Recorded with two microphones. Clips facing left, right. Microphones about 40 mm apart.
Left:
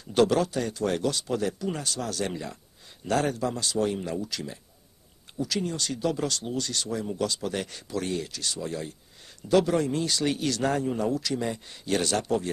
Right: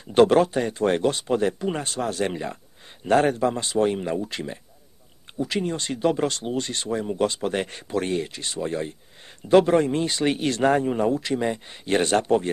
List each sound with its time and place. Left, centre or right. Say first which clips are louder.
0.0 s speech: right 6 dB; right